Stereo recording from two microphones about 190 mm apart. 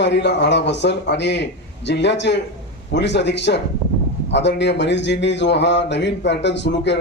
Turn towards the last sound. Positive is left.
turn(degrees=65)  # may be behind; listen again after turning